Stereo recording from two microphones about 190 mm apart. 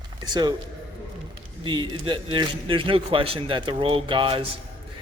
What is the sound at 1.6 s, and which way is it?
A man's voice, 25° right (ahead or behind).